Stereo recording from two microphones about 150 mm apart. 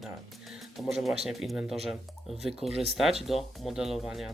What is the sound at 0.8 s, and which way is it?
Speech, centre (ahead or behind).